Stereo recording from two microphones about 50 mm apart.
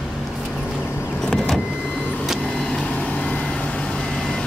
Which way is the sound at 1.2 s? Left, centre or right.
Centre.